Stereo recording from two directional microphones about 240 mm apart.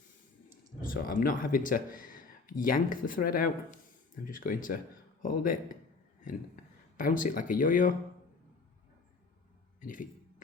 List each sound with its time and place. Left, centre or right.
0.8 s speech: left
6.9 s speech: left
9.8 s speech: left